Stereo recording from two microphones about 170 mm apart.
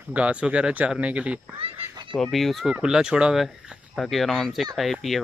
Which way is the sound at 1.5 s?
30° right (ahead or behind).